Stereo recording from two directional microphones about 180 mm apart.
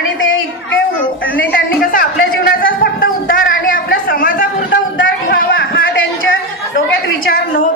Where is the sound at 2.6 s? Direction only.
55° left (ahead or behind).